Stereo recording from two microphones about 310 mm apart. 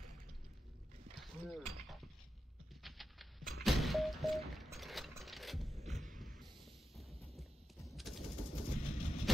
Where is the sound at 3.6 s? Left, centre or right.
Centre.